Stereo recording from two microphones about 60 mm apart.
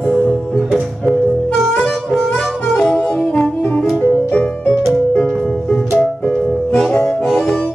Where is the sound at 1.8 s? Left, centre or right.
Centre.